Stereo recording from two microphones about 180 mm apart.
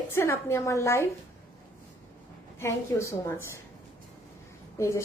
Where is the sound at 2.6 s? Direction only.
15° left (ahead or behind).